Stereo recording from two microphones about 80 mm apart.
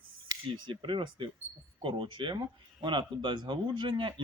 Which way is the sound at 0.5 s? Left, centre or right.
Right.